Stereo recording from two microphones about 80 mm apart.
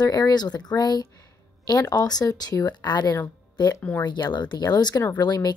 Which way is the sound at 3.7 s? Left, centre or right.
Left.